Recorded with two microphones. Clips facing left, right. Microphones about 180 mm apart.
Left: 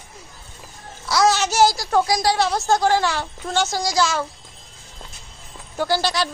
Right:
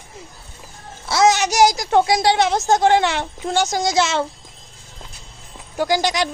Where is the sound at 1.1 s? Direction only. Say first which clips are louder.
Right 2 dB; 20° right (ahead or behind).